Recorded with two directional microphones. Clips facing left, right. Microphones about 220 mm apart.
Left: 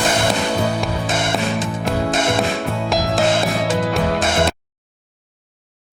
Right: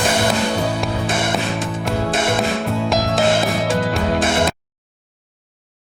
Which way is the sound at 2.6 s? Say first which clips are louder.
Right 1 dB; centre (ahead or behind).